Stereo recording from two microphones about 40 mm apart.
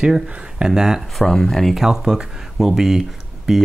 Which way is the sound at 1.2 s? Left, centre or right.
Centre.